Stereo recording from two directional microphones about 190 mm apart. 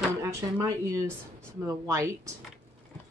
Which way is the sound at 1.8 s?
15° right (ahead or behind).